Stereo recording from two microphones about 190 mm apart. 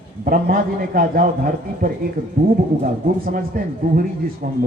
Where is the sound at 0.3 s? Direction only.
50° right (ahead or behind).